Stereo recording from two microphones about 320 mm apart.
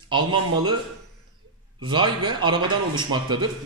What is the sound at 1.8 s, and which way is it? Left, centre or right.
A man's voice, centre.